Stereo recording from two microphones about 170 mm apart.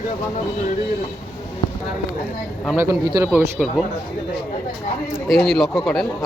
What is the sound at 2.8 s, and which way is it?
Speech, 15° right (ahead or behind).